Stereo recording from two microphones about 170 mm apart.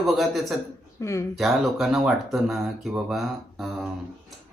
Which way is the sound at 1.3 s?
Centre (ahead or behind).